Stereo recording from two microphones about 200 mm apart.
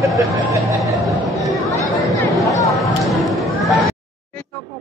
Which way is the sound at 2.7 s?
Centre (ahead or behind).